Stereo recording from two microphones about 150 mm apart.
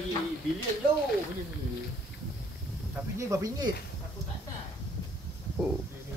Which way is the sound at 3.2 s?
20° right (ahead or behind).